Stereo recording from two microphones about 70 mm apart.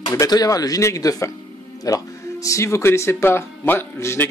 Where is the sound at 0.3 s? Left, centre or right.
Left.